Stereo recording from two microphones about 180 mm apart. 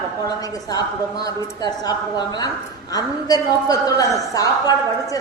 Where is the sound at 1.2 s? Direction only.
20° left (ahead or behind).